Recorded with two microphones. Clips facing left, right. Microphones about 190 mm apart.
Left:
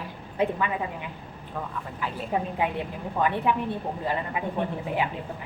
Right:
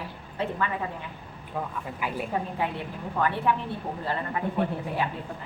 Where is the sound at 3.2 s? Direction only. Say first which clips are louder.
Left 1 dB; 15° left (ahead or behind).